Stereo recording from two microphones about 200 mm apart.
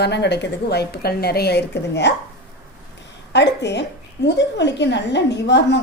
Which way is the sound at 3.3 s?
60° left (ahead or behind).